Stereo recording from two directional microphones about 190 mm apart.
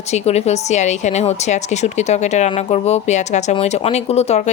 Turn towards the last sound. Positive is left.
turn(degrees=35)  # may be behind; listen again after turning